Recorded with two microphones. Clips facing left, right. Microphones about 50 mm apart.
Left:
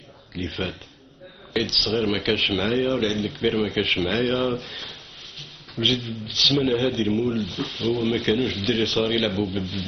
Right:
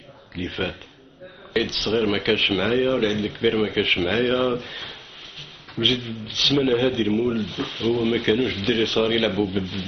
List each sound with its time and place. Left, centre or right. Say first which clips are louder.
0.3 s speech: right 2 dB; centre